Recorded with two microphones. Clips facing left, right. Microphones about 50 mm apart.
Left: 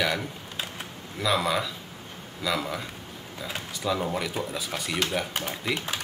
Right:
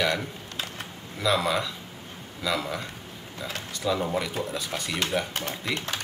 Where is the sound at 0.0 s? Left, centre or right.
Centre.